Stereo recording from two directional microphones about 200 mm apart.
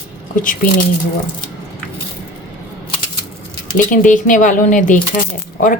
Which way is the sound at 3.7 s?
40° left (ahead or behind).